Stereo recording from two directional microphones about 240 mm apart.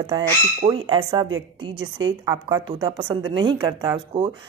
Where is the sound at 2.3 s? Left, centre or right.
Centre.